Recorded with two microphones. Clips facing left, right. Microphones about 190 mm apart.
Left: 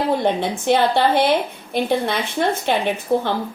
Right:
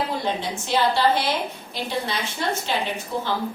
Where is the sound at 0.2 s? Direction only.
60° left (ahead or behind).